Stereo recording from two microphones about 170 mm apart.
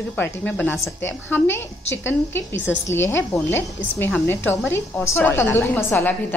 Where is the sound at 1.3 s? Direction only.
15° left (ahead or behind).